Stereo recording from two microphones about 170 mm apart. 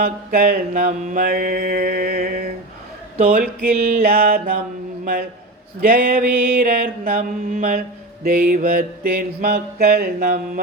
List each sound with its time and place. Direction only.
0.0 s mantra: 60° right (ahead or behind)
5.8 s mantra: 55° right (ahead or behind)